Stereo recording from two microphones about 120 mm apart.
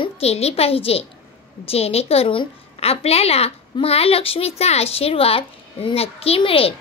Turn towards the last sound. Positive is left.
turn(degrees=50)  # may be behind; listen again after turning